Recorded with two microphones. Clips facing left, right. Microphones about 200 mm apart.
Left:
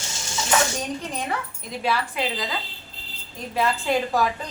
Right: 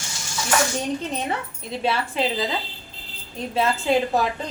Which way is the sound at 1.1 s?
25° right (ahead or behind).